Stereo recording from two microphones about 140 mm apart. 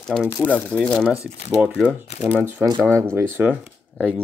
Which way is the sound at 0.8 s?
Centre (ahead or behind).